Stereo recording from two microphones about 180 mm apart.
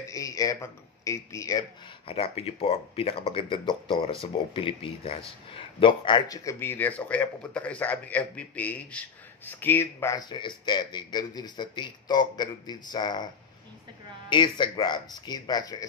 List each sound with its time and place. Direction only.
0.1 s speech: 20° left (ahead or behind)
2.0 s speech: 35° left (ahead or behind)
14.3 s speech: 25° left (ahead or behind)